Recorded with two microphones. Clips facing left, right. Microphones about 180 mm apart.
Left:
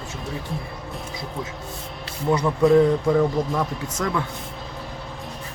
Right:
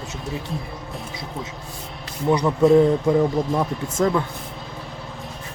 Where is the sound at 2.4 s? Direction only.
Centre (ahead or behind).